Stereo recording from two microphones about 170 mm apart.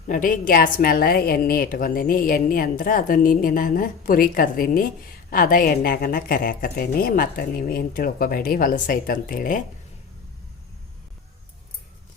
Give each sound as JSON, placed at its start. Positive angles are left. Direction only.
{"t": 0.1, "sound": "a woman's voice", "side_deg": 55}